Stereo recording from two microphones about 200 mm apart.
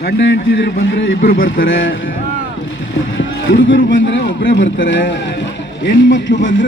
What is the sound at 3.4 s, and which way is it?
A man's voice, 70° left (ahead or behind).